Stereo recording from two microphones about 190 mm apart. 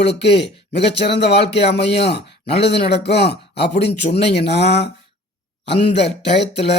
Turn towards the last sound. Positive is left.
turn(degrees=65)  # may be behind; listen again after turning